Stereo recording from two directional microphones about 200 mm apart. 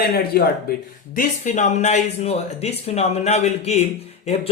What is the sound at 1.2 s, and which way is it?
Speech, 35° left (ahead or behind).